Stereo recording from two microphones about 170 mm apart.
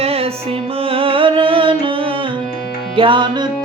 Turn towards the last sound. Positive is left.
turn(degrees=-25)  # may be behind; listen again after turning